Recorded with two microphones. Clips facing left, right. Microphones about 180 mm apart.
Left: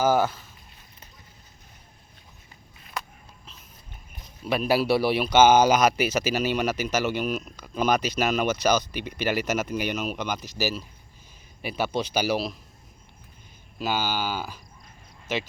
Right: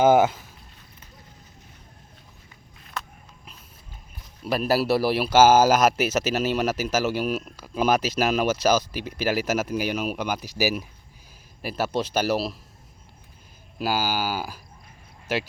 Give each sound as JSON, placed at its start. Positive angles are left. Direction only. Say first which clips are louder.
{"t": 0.0, "sound": "speech", "louder": "right 5 dB", "side_deg": -20}
{"t": 4.4, "sound": "speech", "louder": "even", "side_deg": 0}
{"t": 11.6, "sound": "speech", "louder": "right 1 dB", "side_deg": 0}
{"t": 13.7, "sound": "speech", "louder": "right 2 dB", "side_deg": -10}